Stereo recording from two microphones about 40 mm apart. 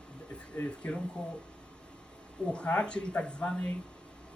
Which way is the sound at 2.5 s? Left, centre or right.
Left.